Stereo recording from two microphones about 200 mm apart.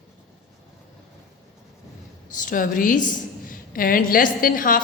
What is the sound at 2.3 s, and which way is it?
A woman's voice, 40° left (ahead or behind).